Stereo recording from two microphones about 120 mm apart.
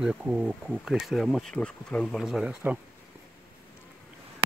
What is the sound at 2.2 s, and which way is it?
Speech, 5° right (ahead or behind).